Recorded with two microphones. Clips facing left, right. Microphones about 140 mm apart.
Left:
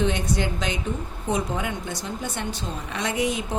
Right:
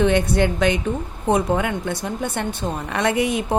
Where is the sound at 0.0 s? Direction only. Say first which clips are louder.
Right 7 dB; 60° right (ahead or behind).